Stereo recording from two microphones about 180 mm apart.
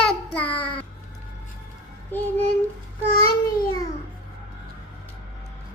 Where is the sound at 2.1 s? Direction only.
10° left (ahead or behind).